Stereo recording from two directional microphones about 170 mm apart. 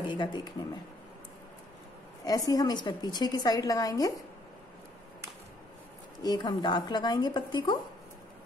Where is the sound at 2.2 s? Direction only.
20° left (ahead or behind).